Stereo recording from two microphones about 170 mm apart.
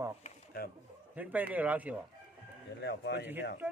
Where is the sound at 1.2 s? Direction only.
10° right (ahead or behind).